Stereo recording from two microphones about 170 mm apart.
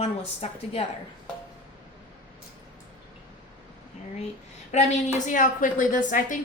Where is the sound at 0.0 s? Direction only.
40° left (ahead or behind).